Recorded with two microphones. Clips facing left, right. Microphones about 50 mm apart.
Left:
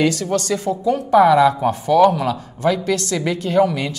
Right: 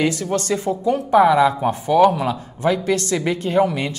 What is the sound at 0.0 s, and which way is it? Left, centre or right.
Speech, right.